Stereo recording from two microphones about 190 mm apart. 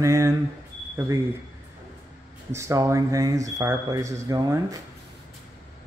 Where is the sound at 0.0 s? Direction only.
15° right (ahead or behind).